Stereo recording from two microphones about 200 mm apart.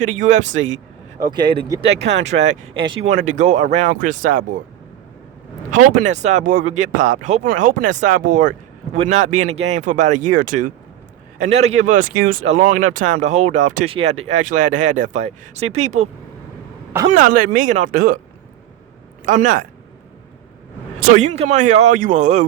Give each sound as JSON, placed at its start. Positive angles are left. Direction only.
{"t": 0.0, "sound": "speech", "side_deg": -35}
{"t": 1.3, "sound": "speech", "side_deg": -20}
{"t": 2.0, "sound": "speech", "side_deg": -65}
{"t": 2.4, "sound": "speech", "side_deg": -25}
{"t": 5.7, "sound": "speech", "side_deg": -40}
{"t": 17.1, "sound": "speech", "side_deg": -40}
{"t": 19.2, "sound": "speech", "side_deg": -40}
{"t": 21.1, "sound": "speech", "side_deg": -35}